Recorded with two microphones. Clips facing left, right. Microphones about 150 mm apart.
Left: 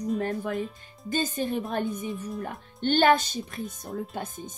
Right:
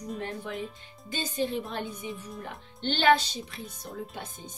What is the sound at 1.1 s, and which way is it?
Speech, 50° left (ahead or behind).